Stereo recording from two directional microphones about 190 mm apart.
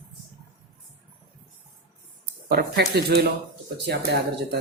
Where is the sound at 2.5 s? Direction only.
55° right (ahead or behind).